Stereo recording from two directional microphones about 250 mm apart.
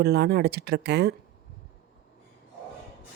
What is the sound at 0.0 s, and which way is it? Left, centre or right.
Speech, right.